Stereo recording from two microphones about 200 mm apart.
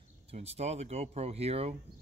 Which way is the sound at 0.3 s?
30° right (ahead or behind).